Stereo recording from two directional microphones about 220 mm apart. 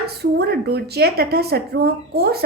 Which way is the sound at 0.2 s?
45° right (ahead or behind).